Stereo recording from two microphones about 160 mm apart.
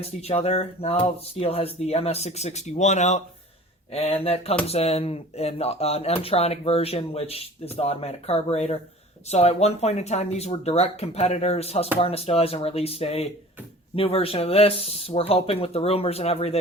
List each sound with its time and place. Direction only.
0.2 s speech: 40° left (ahead or behind)